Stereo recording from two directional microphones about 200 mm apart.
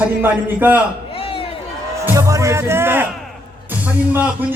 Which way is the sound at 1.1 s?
30° left (ahead or behind).